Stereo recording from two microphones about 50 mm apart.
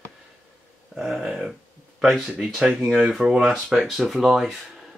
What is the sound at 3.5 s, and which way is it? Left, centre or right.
Speech, centre.